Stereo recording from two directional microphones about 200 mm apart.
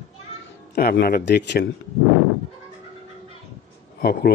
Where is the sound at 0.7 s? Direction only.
50° left (ahead or behind).